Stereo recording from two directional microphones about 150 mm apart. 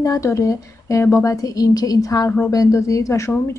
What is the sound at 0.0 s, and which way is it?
Speech, 20° left (ahead or behind).